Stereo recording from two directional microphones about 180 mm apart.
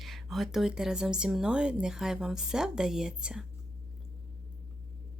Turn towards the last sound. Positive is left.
turn(degrees=-5)  # may be behind; listen again after turning